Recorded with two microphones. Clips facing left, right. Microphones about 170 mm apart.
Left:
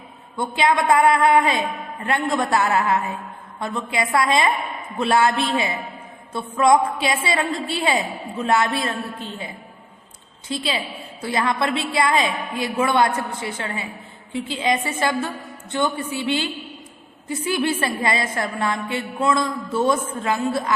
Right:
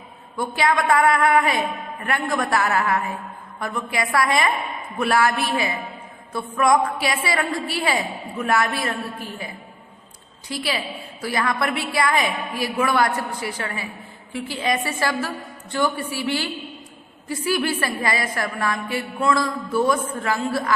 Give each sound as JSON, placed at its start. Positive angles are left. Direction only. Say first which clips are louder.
{"t": 0.3, "sound": "a woman's voice", "louder": "left 1 dB", "side_deg": 20}
{"t": 10.5, "sound": "a woman's voice", "louder": "left 1 dB", "side_deg": 25}